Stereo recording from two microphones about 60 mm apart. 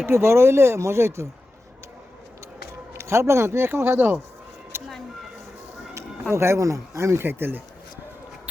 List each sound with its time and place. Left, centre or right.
0.0 s speech: right
2.9 s speech: right
4.7 s a sound: right
6.3 s speech: right
7.3 s speech: right